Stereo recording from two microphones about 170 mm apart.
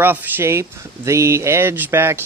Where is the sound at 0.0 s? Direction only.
10° right (ahead or behind).